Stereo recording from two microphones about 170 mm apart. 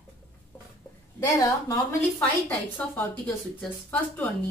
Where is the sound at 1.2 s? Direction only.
20° left (ahead or behind).